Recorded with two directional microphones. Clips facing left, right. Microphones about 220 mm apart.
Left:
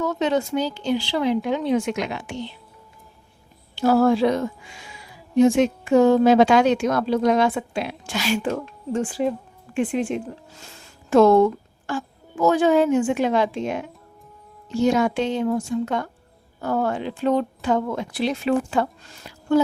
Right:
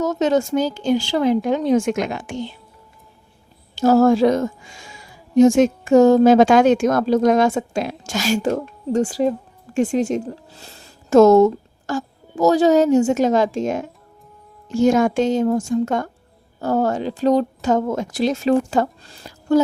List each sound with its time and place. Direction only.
0.0 s speech: 40° right (ahead or behind)
3.8 s a woman's voice: 45° right (ahead or behind)